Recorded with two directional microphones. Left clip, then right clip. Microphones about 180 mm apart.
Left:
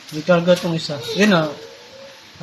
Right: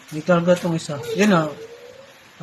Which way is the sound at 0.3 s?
15° right (ahead or behind).